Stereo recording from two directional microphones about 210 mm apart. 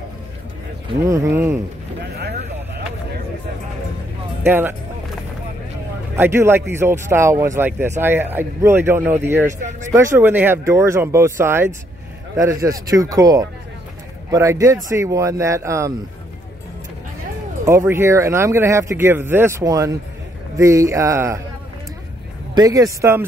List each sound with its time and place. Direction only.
1.0 s speech: 15° right (ahead or behind)
4.4 s speech: 10° right (ahead or behind)
6.1 s speech: 10° right (ahead or behind)
9.7 s speech: 35° right (ahead or behind)
9.9 s speech: 10° right (ahead or behind)
17.6 s speech: 15° right (ahead or behind)
22.5 s speech: 15° right (ahead or behind)